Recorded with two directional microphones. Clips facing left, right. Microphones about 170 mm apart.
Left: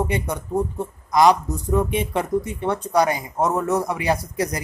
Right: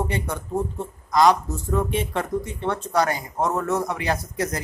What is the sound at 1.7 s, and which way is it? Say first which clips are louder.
Speech: left 3 dB; 15° left (ahead or behind).